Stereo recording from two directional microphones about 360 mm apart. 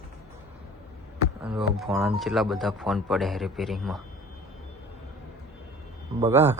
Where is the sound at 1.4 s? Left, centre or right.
Centre.